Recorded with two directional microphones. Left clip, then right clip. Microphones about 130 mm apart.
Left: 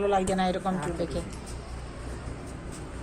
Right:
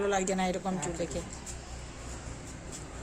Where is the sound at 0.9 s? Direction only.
30° right (ahead or behind).